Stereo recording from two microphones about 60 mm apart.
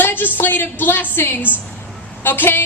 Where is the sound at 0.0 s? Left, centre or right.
Left.